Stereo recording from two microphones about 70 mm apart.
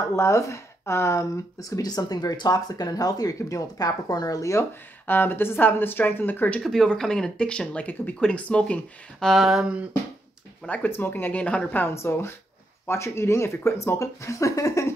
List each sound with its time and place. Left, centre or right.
0.1 s speech: left
1.8 s speech: left
4.4 s speech: left
5.0 s speech: left
6.6 s speech: centre
9.2 s a sound: centre
10.7 s speech: left
11.9 s speech: left